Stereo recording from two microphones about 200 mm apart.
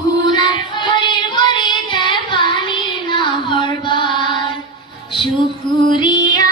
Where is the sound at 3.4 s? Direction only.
25° left (ahead or behind).